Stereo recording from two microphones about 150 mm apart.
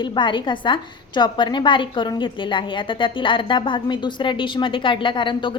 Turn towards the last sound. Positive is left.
turn(degrees=35)  # may be behind; listen again after turning